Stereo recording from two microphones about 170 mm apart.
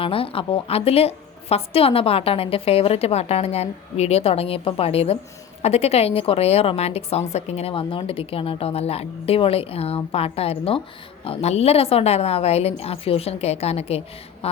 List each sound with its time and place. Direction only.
0.0 s a woman's voice: 30° left (ahead or behind)